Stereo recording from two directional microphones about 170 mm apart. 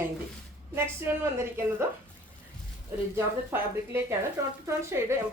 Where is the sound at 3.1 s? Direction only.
15° right (ahead or behind).